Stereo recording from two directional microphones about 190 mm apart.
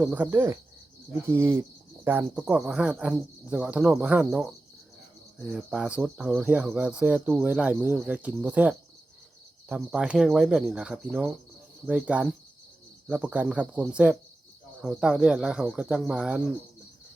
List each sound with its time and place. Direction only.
0.0 s speech: 10° right (ahead or behind)